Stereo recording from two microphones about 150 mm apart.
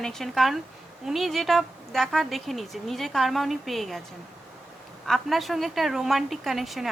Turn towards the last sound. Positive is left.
turn(degrees=0)  # may be behind; listen again after turning